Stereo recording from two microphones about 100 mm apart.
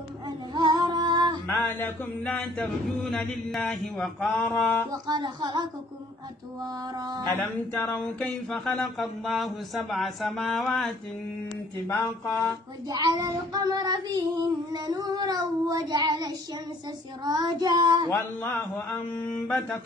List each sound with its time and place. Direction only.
0.6 s female singing: 45° right (ahead or behind)
1.6 s a capella: 20° left (ahead or behind)
4.3 s a capella: 15° left (ahead or behind)
5.0 s speech: 50° right (ahead or behind)
6.6 s child singing: 40° right (ahead or behind)
7.2 s speech: 20° left (ahead or behind)
7.9 s a capella: 15° left (ahead or behind)
8.5 s speech: centre (ahead or behind)
12.8 s child singing: 40° right (ahead or behind)
18.6 s speech: 25° left (ahead or behind)
19.4 s a capella: 15° left (ahead or behind)